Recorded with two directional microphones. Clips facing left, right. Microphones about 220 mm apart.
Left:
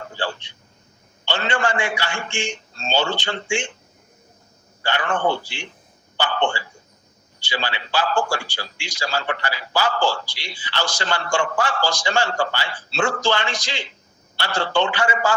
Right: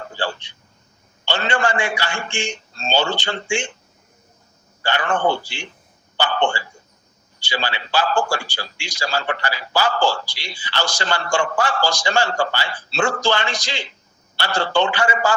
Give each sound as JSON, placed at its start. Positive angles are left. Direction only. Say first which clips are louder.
{"t": 0.2, "sound": "a sound", "louder": "right 1 dB", "side_deg": -40}
{"t": 1.2, "sound": "a man's voice", "louder": "right 2 dB", "side_deg": -35}
{"t": 4.8, "sound": "a man's voice", "louder": "right 2 dB", "side_deg": -40}